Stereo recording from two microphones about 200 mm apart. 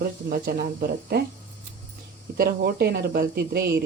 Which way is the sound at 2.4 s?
50° right (ahead or behind).